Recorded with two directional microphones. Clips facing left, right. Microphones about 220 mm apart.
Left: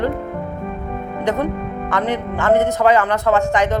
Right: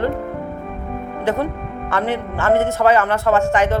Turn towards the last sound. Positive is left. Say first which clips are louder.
# even
turn(degrees=15)  # may be behind; listen again after turning